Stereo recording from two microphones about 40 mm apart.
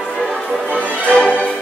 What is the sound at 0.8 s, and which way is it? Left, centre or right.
Music, right.